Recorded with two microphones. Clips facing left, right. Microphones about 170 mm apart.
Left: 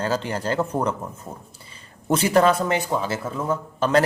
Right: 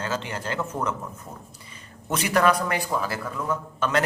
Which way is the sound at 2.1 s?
30° left (ahead or behind).